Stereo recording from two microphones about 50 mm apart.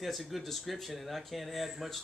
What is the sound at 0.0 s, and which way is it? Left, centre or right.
Speech, centre.